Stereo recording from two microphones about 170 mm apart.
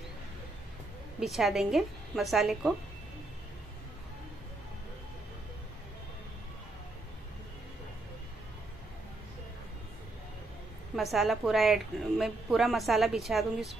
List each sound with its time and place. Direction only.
1.2 s a woman's voice: centre (ahead or behind)
11.0 s a woman's voice: centre (ahead or behind)